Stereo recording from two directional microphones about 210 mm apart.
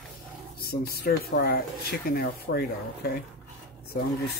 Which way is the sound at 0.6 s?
45° left (ahead or behind).